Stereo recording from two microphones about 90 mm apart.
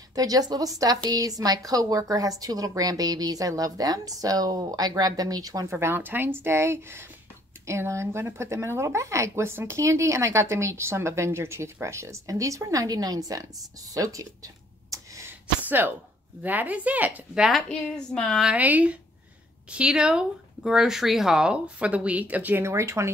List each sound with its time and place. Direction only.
0.1 s speech: 45° right (ahead or behind)
5.7 s speech: 30° right (ahead or behind)
15.4 s a sound: 20° right (ahead or behind)
16.4 s speech: 20° right (ahead or behind)
17.9 s a sound: 5° left (ahead or behind)
18.4 s speech: 15° right (ahead or behind)
22.6 s speech: 30° right (ahead or behind)